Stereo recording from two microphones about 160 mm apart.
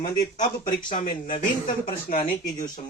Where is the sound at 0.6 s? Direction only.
55° left (ahead or behind).